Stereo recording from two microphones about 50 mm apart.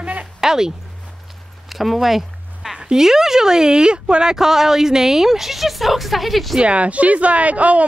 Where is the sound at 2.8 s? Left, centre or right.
Centre.